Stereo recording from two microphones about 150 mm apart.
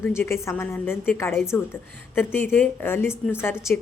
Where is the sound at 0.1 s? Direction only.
20° left (ahead or behind).